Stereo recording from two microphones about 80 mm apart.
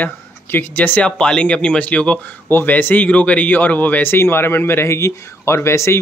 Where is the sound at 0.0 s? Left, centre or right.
Left.